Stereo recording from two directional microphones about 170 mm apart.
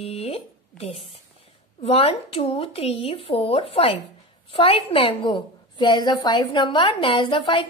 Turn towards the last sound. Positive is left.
turn(degrees=30)  # may be behind; listen again after turning